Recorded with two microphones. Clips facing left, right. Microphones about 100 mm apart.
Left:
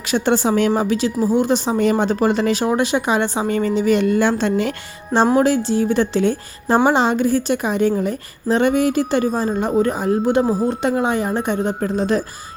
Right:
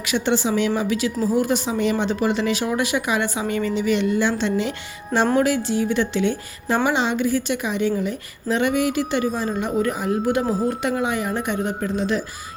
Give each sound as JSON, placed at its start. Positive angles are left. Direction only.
{"t": 0.0, "sound": "a woman's voice", "side_deg": 40}
{"t": 0.8, "sound": "speech", "side_deg": 35}
{"t": 5.4, "sound": "speech", "side_deg": 30}
{"t": 10.4, "sound": "speech", "side_deg": 10}
{"t": 10.7, "sound": "speech", "side_deg": 35}